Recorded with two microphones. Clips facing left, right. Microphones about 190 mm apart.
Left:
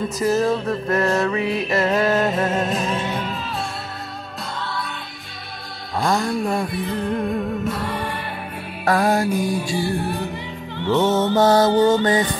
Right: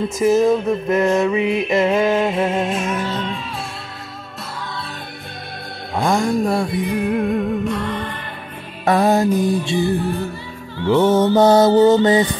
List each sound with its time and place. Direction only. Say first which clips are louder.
0.2 s music: right 5 dB; 15° right (ahead or behind)
1.4 s music: right 4 dB; 35° left (ahead or behind)
1.7 s music: right 2 dB; 15° right (ahead or behind)
2.5 s music: right 1 dB; 40° left (ahead or behind)
6.0 s music: right 3 dB; 15° right (ahead or behind); by 8.2 s 10° left (ahead or behind)
8.8 s music: right 3 dB; 20° right (ahead or behind)
9.3 s music: right 4 dB; 10° left (ahead or behind)
11.1 s music: right 4 dB; 15° right (ahead or behind)